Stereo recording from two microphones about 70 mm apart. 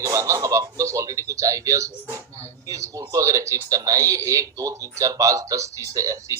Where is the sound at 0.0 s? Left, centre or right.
Right.